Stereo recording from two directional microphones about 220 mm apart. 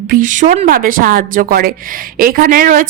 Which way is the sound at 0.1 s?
35° right (ahead or behind).